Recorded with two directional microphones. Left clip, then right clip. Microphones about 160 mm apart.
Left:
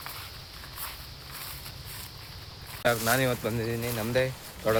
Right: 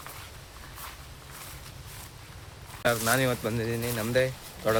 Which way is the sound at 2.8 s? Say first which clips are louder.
Even; 5° right (ahead or behind).